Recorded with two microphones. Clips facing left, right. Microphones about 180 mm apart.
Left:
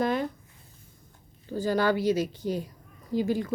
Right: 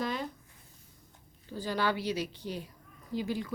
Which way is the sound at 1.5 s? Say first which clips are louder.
Left 7 dB; 45° left (ahead or behind).